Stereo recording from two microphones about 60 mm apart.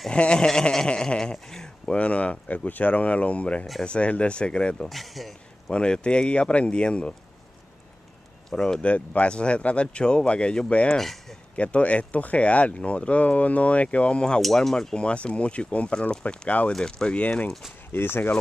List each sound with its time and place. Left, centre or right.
0.1 s a man's voice: centre
2.0 s a man's voice: left
4.8 s speech: centre
5.7 s a man's voice: centre
8.5 s a man's voice: centre
8.8 s speech: left
11.0 s speech: centre
11.5 s speech: left
14.4 s a man's voice: centre
15.0 s a man's voice: centre
17.2 s speech: left
17.5 s speech: centre
17.9 s speech: left